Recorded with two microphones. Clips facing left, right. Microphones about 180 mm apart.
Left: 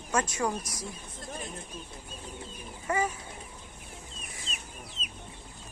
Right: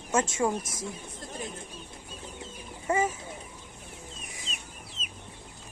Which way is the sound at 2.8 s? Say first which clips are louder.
Right 3 dB; 25° right (ahead or behind).